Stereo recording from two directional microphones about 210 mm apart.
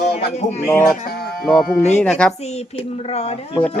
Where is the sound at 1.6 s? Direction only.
35° left (ahead or behind).